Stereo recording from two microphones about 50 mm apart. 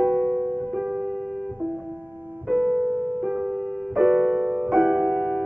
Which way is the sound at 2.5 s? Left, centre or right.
Centre.